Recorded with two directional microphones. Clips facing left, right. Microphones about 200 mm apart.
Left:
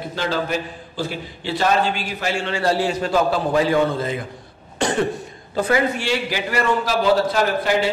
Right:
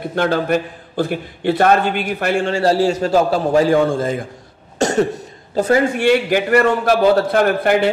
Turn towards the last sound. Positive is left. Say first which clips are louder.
# right 5 dB
turn(degrees=-60)  # may be behind; listen again after turning